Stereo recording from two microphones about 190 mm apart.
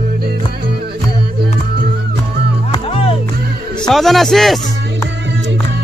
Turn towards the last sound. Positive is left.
turn(degrees=0)  # may be behind; listen again after turning